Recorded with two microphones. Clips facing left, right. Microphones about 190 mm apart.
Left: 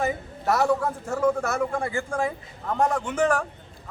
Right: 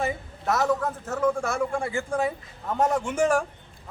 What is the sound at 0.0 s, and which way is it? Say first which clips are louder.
A man's voice: left 2 dB; 10° left (ahead or behind).